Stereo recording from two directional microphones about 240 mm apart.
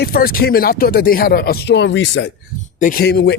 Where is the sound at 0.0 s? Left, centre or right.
Left.